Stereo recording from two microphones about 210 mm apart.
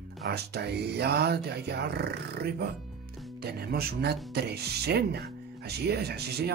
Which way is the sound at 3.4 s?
50° right (ahead or behind).